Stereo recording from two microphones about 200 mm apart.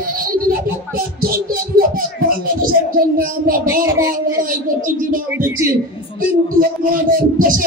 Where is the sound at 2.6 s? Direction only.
45° right (ahead or behind).